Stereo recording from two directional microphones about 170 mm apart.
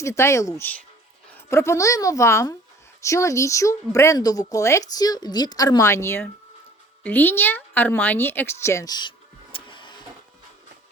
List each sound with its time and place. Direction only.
0.0 s a woman's voice: 15° left (ahead or behind)